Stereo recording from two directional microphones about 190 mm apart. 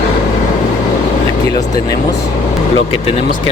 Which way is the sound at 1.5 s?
20° left (ahead or behind).